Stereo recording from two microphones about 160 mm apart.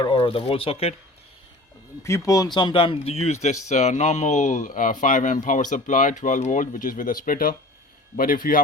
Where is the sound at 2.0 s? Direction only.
20° left (ahead or behind).